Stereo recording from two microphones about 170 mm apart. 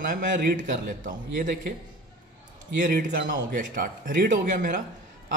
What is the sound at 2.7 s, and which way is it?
Speech, 50° right (ahead or behind).